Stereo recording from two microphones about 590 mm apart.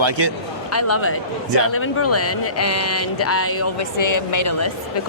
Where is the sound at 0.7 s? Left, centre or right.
Left.